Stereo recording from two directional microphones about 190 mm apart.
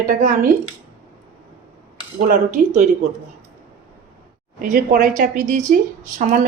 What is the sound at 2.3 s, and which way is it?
Speech, 40° right (ahead or behind).